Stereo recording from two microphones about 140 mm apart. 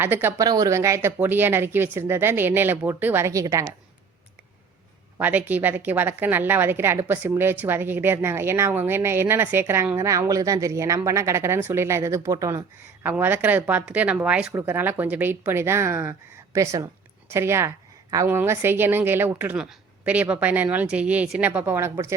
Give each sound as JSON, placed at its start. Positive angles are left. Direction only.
{"t": 0.0, "sound": "a woman's voice", "side_deg": -15}
{"t": 0.4, "sound": "a woman's voice", "side_deg": -25}
{"t": 5.1, "sound": "a woman's voice", "side_deg": -10}